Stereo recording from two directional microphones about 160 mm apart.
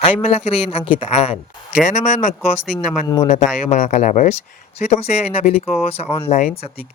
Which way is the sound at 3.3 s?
50° left (ahead or behind).